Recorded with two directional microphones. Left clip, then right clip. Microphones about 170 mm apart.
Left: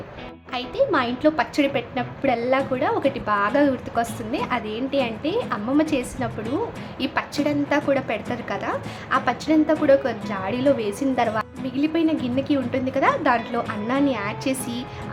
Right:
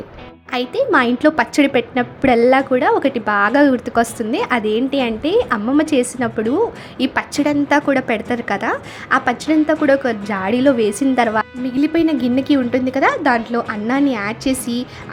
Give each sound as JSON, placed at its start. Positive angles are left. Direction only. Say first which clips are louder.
{"t": 0.5, "sound": "a woman's voice", "louder": "right 6 dB", "side_deg": -35}